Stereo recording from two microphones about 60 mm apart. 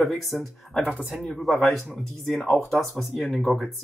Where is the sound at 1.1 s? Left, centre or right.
Centre.